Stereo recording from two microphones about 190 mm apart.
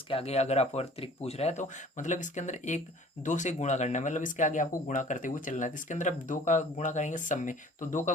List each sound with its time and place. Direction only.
0.1 s speech: 30° left (ahead or behind)